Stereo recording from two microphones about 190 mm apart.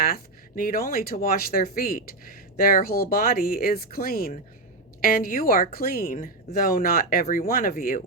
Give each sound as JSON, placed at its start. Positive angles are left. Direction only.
{"t": 0.0, "sound": "speech", "side_deg": 50}